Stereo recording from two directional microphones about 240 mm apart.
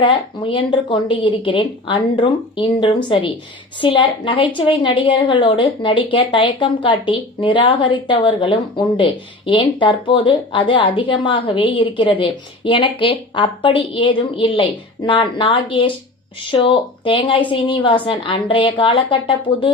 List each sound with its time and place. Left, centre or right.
0.0 s a woman's voice: centre